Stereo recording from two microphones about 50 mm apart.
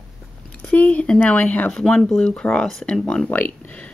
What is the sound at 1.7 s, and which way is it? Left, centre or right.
Speech, centre.